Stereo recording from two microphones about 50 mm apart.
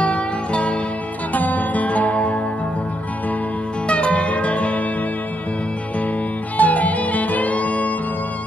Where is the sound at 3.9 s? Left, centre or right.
Left.